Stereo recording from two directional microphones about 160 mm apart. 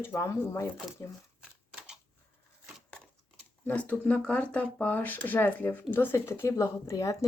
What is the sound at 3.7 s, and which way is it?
Speech, 10° left (ahead or behind).